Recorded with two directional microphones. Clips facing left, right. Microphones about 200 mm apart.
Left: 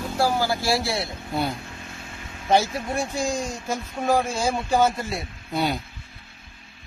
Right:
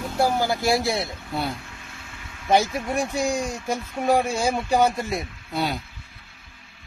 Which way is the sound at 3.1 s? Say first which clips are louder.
Right 2 dB; 15° right (ahead or behind).